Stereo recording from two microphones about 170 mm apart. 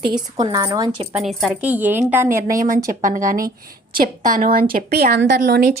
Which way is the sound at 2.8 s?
50° right (ahead or behind).